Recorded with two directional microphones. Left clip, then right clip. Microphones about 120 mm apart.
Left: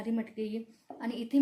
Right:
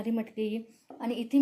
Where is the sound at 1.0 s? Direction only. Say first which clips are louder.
Right 4 dB; 35° right (ahead or behind).